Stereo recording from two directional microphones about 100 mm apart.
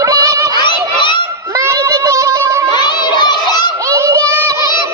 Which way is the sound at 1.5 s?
35° right (ahead or behind).